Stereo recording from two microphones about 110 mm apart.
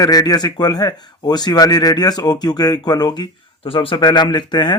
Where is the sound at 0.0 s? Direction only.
35° left (ahead or behind).